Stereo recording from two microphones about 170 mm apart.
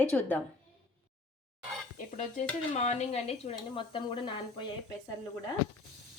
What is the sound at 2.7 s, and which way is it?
Speech, 40° left (ahead or behind).